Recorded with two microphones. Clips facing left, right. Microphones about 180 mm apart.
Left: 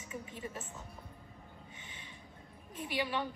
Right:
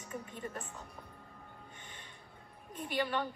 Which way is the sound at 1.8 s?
55° right (ahead or behind).